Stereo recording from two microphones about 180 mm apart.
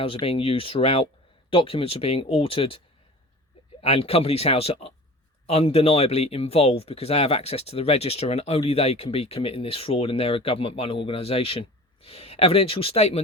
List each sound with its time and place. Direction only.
0.0 s speech: 30° left (ahead or behind)